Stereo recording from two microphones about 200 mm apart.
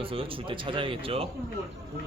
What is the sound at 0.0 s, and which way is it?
Speech, 25° right (ahead or behind).